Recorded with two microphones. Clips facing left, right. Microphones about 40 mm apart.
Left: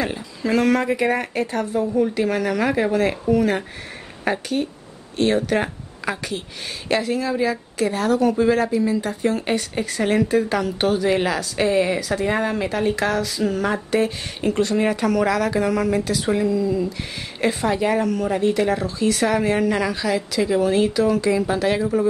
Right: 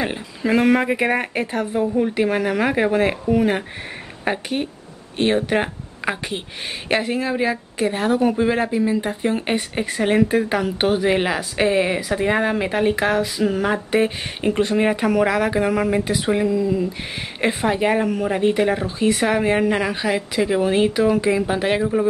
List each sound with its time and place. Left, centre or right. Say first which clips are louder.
0.0 s a woman's voice: right 1 dB; right